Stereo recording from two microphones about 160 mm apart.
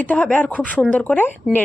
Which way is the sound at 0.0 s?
10° left (ahead or behind).